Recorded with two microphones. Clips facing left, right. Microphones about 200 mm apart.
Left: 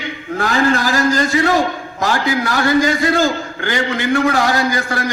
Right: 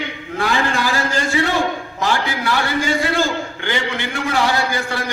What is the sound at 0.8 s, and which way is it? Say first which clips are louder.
A man's voice: left 5 dB; 40° left (ahead or behind).